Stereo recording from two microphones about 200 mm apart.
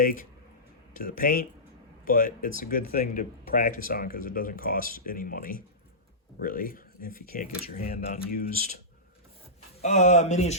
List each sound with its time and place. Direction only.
0.0 s speech: 45° left (ahead or behind)
9.8 s speech: 35° left (ahead or behind)